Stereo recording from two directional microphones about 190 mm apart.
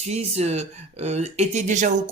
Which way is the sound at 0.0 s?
35° right (ahead or behind).